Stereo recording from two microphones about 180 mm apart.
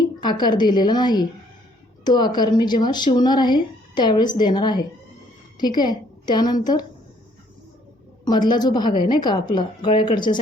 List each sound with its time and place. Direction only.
0.0 s speech: 25° left (ahead or behind)
8.2 s speech: 25° left (ahead or behind)